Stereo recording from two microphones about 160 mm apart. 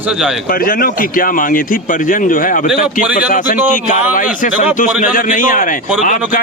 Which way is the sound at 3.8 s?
55° left (ahead or behind).